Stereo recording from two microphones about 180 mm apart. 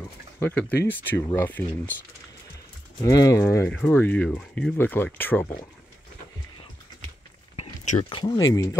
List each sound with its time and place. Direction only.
0.0 s speech: 10° left (ahead or behind)
3.0 s speech: 20° left (ahead or behind)
7.5 s a sound: 40° left (ahead or behind)
8.1 s speech: 30° left (ahead or behind)
8.4 s speech: 20° left (ahead or behind)